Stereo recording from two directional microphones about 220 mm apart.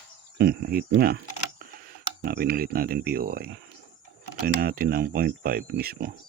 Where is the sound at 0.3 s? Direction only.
45° right (ahead or behind).